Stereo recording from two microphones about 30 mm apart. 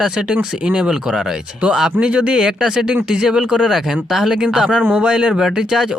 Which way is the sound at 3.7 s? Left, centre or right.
Centre.